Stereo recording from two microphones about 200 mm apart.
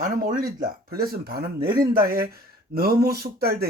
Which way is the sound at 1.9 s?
45° right (ahead or behind).